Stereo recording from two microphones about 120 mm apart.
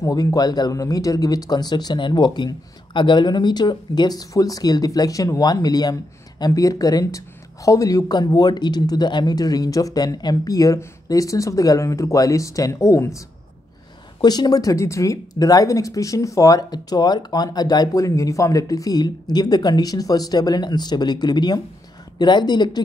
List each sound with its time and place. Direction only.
0.0 s speech: 30° left (ahead or behind)
14.2 s speech: 35° left (ahead or behind)